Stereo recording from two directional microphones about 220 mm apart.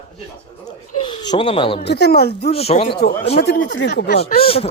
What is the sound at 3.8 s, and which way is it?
Speech, 50° left (ahead or behind).